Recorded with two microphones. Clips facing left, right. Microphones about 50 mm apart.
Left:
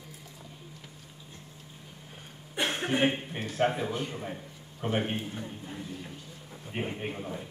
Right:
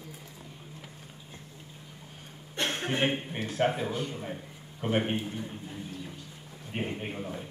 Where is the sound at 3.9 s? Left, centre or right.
Left.